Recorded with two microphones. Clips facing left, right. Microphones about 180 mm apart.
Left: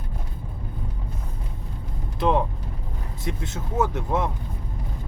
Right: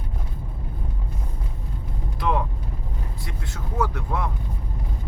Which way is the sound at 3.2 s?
20° left (ahead or behind).